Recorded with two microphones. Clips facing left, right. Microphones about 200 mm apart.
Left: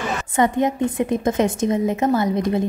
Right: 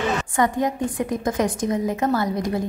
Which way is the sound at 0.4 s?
20° left (ahead or behind).